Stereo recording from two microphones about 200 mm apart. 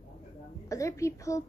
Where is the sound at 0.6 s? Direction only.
15° left (ahead or behind).